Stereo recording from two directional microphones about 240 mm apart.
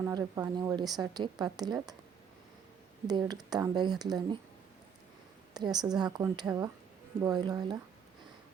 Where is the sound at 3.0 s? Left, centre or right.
Centre.